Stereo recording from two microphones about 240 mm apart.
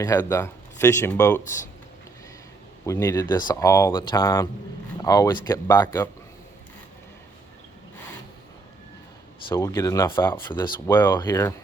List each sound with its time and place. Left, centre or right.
0.0 s speech: centre
2.8 s speech: centre
9.5 s speech: centre